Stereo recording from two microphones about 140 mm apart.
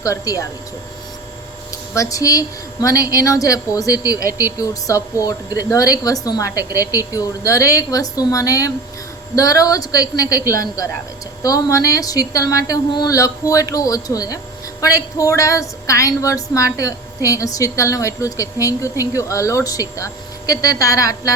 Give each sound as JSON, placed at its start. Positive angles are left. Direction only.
{"t": 0.0, "sound": "a woman's voice", "side_deg": 25}
{"t": 2.0, "sound": "a woman's voice", "side_deg": 25}